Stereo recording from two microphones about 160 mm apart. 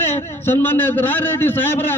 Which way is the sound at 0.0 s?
15° left (ahead or behind).